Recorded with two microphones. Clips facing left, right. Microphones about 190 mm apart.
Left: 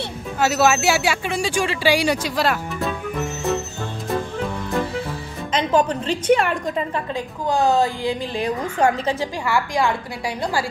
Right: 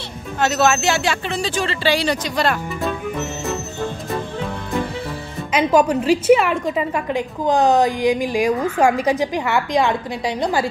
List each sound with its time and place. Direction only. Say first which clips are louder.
0.4 s speech: even; 10° left (ahead or behind)
5.5 s a woman's voice: right 3 dB; 10° right (ahead or behind)
7.2 s a woman's voice: right 4 dB; 20° right (ahead or behind)